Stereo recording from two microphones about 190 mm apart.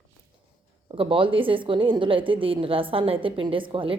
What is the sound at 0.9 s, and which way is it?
A woman's voice, 25° right (ahead or behind).